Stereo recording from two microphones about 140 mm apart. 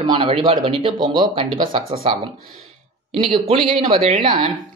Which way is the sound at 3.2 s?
45° right (ahead or behind).